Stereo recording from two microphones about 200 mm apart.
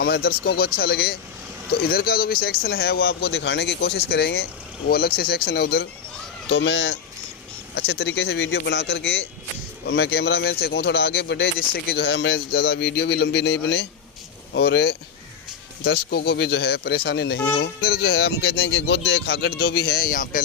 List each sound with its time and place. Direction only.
0.0 s speech: 50° left (ahead or behind)